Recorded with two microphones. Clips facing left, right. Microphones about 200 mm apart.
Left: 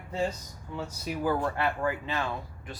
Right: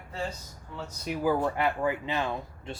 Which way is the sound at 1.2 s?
10° right (ahead or behind).